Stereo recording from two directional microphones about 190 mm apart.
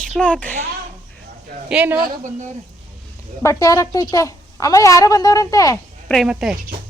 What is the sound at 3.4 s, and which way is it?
A woman's voice, 15° left (ahead or behind).